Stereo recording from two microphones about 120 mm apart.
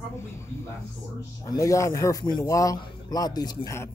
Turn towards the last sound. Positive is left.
turn(degrees=35)  # may be behind; listen again after turning